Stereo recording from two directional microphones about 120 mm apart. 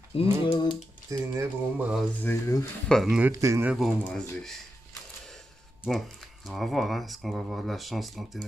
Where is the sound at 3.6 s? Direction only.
5° right (ahead or behind).